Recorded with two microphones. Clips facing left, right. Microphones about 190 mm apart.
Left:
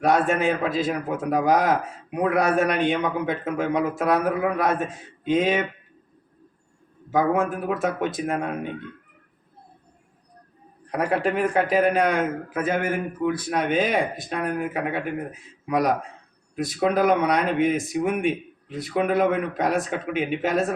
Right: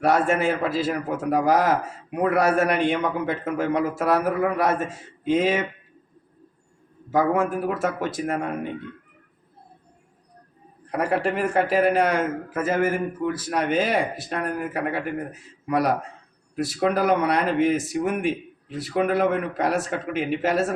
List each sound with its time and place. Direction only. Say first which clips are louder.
0.0 s a man's voice: even; 5° right (ahead or behind)
7.1 s a man's voice: even; 5° right (ahead or behind)
10.9 s a man's voice: even; 5° right (ahead or behind)